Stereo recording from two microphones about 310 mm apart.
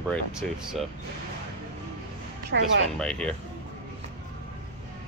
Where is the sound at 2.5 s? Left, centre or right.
Right.